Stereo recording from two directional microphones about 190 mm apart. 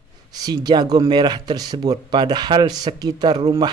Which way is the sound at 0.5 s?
20° right (ahead or behind).